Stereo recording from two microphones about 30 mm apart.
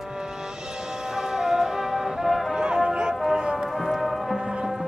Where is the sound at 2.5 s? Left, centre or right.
Right.